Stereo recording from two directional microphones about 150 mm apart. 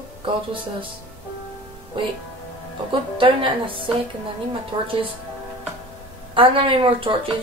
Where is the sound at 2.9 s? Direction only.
35° right (ahead or behind).